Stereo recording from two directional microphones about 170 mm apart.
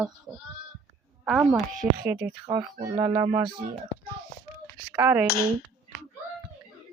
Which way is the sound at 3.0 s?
20° right (ahead or behind).